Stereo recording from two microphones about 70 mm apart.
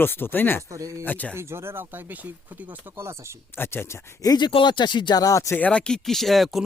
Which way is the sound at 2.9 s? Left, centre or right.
Right.